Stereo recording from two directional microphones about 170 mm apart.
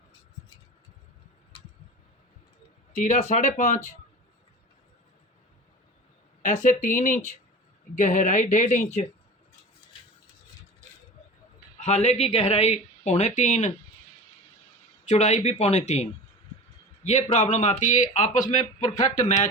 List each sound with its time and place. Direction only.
3.0 s speech: 45° left (ahead or behind)
6.4 s speech: 45° left (ahead or behind)
11.8 s speech: 40° left (ahead or behind)
15.0 s a man's voice: 40° left (ahead or behind)